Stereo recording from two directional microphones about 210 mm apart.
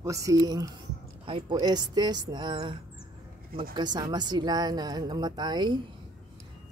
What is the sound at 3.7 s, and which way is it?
A woman's voice, 20° right (ahead or behind).